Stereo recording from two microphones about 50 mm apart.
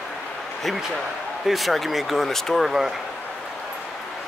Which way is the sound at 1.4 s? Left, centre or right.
Centre.